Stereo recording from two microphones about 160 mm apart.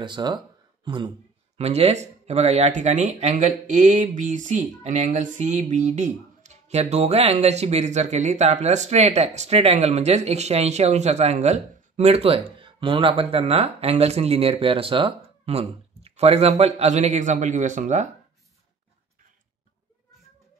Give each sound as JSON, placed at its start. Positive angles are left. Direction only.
{"t": 0.0, "sound": "speech", "side_deg": -25}
{"t": 1.6, "sound": "speech", "side_deg": -40}